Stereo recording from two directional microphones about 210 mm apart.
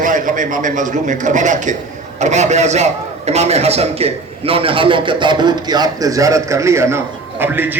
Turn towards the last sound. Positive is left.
turn(degrees=-10)  # may be behind; listen again after turning